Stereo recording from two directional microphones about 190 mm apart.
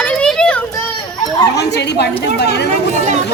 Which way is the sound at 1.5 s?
60° left (ahead or behind).